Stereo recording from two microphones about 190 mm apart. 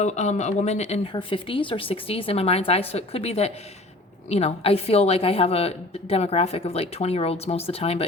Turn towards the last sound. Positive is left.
turn(degrees=30)  # may be behind; listen again after turning